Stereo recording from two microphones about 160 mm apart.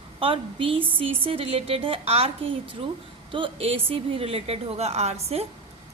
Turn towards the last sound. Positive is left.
turn(degrees=-40)  # may be behind; listen again after turning